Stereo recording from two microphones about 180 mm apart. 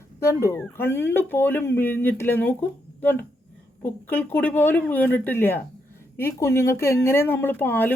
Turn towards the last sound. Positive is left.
turn(degrees=10)  # may be behind; listen again after turning